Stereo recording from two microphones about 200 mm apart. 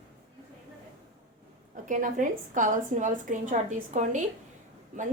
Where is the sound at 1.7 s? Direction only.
40° right (ahead or behind).